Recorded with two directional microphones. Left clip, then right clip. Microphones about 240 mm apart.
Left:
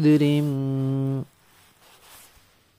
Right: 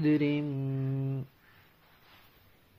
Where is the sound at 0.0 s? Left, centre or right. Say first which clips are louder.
Left 8 dB; left.